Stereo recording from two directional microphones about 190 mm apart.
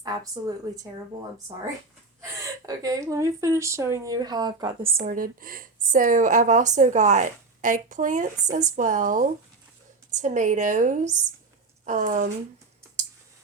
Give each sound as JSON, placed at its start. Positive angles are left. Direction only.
{"t": 0.0, "sound": "a woman's voice", "side_deg": -20}
{"t": 2.6, "sound": "speech", "side_deg": -20}
{"t": 5.0, "sound": "a woman's voice", "side_deg": -50}